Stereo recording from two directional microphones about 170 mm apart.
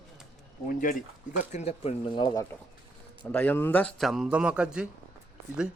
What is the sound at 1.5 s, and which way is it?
Speech, 40° left (ahead or behind).